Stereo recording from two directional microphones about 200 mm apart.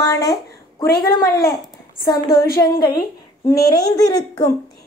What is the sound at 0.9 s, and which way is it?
A woman's voice, 45° left (ahead or behind).